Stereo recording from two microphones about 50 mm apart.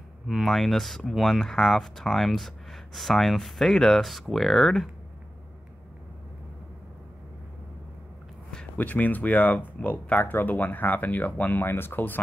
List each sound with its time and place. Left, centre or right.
0.3 s speech: centre
8.7 s speech: left
11.6 s speech: left